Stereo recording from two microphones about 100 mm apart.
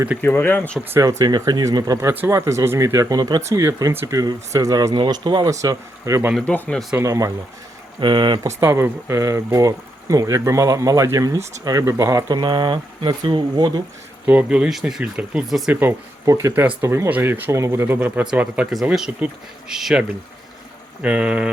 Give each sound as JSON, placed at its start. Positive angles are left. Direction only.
{"t": 0.2, "sound": "speech", "side_deg": 20}
{"t": 0.9, "sound": "speech", "side_deg": -35}
{"t": 3.4, "sound": "speech", "side_deg": -30}
{"t": 6.4, "sound": "speech", "side_deg": 15}
{"t": 7.0, "sound": "speech", "side_deg": -35}
{"t": 7.9, "sound": "speech", "side_deg": -50}
{"t": 8.4, "sound": "speech", "side_deg": -25}
{"t": 12.4, "sound": "speech", "side_deg": -50}
{"t": 14.3, "sound": "speech", "side_deg": -15}
{"t": 15.7, "sound": "speech", "side_deg": -20}
{"t": 16.2, "sound": "speech", "side_deg": -30}